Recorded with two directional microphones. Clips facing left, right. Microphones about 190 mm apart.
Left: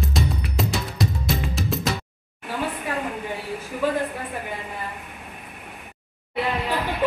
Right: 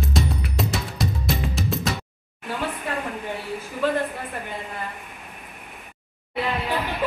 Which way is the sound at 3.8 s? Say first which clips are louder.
Even; 10° left (ahead or behind).